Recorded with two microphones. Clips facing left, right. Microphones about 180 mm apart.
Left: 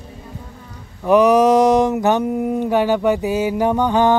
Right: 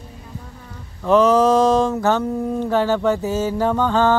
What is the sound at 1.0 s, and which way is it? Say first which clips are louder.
Mantra: left 2 dB; 15° left (ahead or behind).